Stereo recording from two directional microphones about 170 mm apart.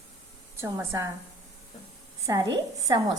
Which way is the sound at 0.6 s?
15° right (ahead or behind).